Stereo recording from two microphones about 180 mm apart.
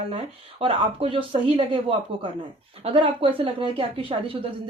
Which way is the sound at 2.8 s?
30° right (ahead or behind).